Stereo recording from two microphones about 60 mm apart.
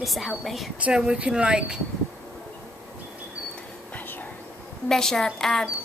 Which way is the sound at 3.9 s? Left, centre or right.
Left.